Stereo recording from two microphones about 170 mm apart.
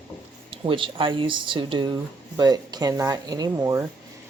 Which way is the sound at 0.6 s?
30° right (ahead or behind).